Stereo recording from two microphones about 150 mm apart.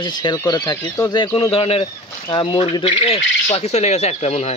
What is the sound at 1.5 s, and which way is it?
Speech, 40° left (ahead or behind).